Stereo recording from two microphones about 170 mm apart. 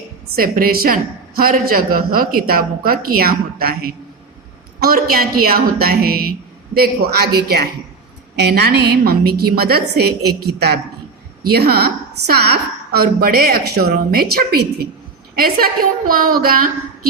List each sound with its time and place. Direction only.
0.3 s a woman's voice: 60° right (ahead or behind)
11.5 s a woman's voice: 65° right (ahead or behind)